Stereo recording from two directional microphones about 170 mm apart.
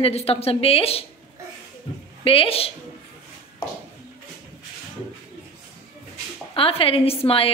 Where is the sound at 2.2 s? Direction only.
35° left (ahead or behind).